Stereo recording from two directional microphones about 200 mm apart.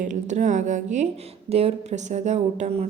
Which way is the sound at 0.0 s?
40° right (ahead or behind).